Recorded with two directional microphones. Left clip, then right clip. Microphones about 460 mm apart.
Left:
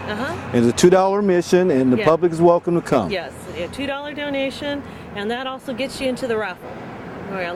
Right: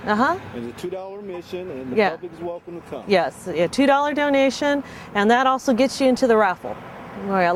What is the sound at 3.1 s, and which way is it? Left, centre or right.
Speech, right.